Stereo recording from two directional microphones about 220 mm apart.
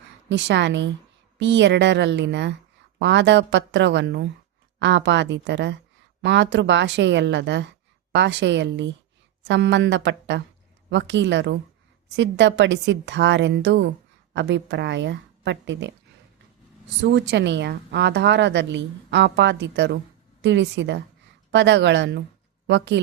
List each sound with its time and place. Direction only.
0.3 s a woman's voice: 55° right (ahead or behind)
17.0 s a woman's voice: 50° right (ahead or behind)